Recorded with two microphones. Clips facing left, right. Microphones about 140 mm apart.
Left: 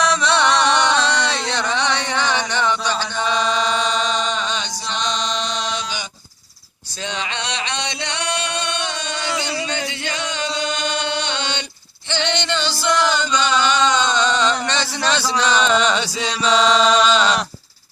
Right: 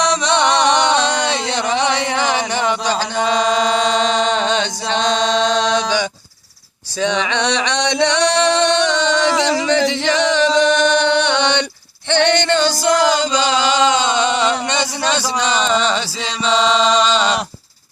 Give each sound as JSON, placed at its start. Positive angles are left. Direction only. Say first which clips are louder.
{"t": 0.5, "sound": "music", "louder": "right 3 dB", "side_deg": -25}
{"t": 4.9, "sound": "male singing", "louder": "right 7 dB", "side_deg": -90}
{"t": 7.0, "sound": "a sound", "louder": "right 9 dB", "side_deg": -75}
{"t": 12.0, "sound": "chant", "louder": "right 8 dB", "side_deg": -60}
{"t": 15.6, "sound": "chant", "louder": "even", "side_deg": 0}